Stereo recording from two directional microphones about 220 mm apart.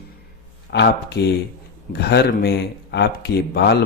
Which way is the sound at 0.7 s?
50° left (ahead or behind).